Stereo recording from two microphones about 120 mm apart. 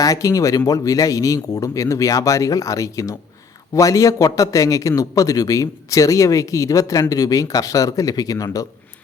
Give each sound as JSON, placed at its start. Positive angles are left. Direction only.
{"t": 0.0, "sound": "a man's voice", "side_deg": 30}